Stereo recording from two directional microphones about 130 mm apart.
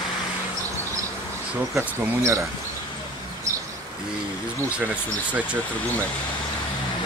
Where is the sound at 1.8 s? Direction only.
20° right (ahead or behind).